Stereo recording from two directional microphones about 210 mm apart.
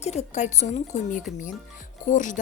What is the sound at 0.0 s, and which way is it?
A woman's voice, 30° left (ahead or behind).